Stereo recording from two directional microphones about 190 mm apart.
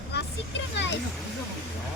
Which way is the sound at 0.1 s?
65° left (ahead or behind).